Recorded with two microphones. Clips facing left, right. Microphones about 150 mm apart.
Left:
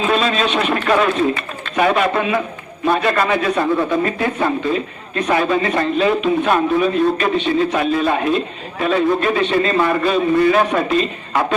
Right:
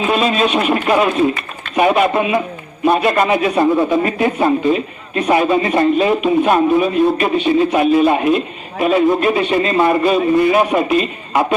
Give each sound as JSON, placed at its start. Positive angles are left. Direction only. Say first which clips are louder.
{"t": 0.0, "sound": "a man's voice", "louder": "right 2 dB", "side_deg": -15}